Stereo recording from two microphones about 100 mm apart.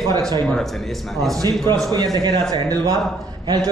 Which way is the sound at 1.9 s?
45° right (ahead or behind).